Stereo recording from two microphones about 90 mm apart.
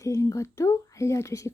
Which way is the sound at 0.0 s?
35° left (ahead or behind).